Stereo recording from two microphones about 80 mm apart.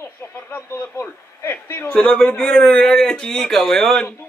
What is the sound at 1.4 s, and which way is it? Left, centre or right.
Speech, left.